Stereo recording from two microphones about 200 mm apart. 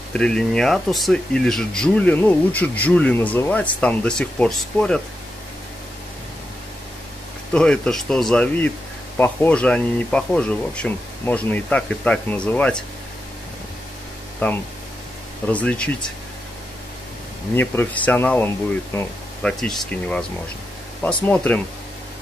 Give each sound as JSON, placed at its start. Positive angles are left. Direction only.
{"t": 0.1, "sound": "speech", "side_deg": 5}
{"t": 7.5, "sound": "speech", "side_deg": 5}
{"t": 14.4, "sound": "speech", "side_deg": 10}
{"t": 17.6, "sound": "speech", "side_deg": 10}